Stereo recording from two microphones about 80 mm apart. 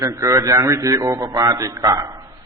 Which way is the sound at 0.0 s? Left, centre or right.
Right.